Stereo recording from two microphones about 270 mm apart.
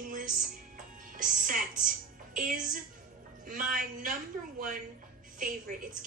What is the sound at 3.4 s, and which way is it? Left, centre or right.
Speech, right.